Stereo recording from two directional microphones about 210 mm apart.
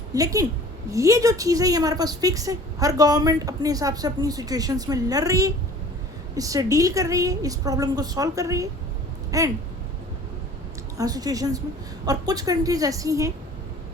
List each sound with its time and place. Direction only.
0.1 s a woman's voice: 15° right (ahead or behind)
10.9 s a woman's voice: 15° right (ahead or behind)